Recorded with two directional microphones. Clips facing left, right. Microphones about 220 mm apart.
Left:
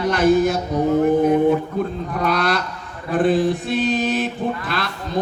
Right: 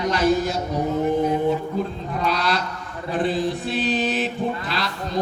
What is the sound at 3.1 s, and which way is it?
Mantra, 50° left (ahead or behind).